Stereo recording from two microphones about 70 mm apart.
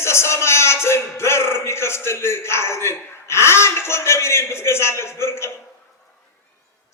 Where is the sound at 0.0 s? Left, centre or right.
Left.